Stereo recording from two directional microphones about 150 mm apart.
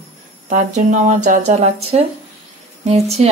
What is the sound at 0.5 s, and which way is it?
Speech, 55° right (ahead or behind).